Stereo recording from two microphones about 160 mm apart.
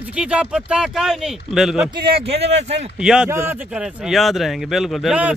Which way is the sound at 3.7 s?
5° right (ahead or behind).